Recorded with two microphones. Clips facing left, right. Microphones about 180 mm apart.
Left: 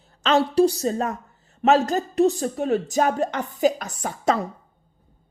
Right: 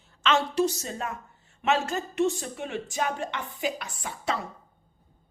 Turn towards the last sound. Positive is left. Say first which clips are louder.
# left 8 dB
turn(degrees=45)  # may be behind; listen again after turning